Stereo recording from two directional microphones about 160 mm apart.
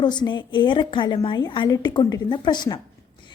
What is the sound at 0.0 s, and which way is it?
A woman's voice, 25° left (ahead or behind).